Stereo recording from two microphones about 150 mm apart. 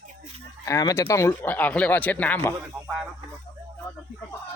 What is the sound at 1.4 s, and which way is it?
Speech, 10° left (ahead or behind).